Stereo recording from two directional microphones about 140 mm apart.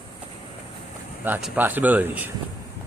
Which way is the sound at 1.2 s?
15° right (ahead or behind).